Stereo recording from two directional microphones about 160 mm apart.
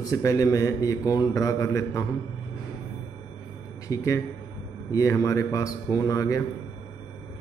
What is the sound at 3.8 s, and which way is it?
A man's voice, 20° left (ahead or behind).